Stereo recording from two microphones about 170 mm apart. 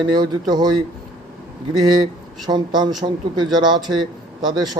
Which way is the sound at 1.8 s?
25° right (ahead or behind).